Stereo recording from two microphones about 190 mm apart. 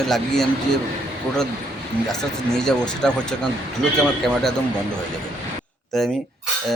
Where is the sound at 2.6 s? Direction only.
5° left (ahead or behind).